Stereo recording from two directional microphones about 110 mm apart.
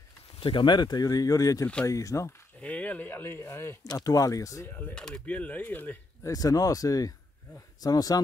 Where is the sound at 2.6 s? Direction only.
15° left (ahead or behind).